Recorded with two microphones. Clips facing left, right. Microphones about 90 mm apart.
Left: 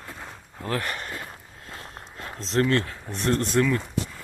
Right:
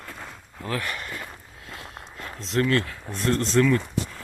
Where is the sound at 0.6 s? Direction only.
35° left (ahead or behind).